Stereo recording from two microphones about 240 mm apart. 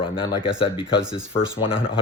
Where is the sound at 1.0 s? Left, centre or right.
Centre.